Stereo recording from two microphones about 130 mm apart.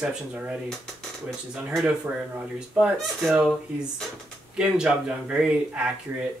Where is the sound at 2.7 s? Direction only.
5° right (ahead or behind).